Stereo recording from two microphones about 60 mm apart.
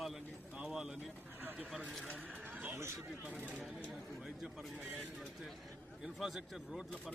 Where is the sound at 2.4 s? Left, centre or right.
Right.